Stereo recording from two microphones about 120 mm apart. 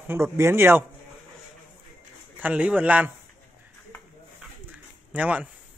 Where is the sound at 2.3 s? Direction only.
10° right (ahead or behind).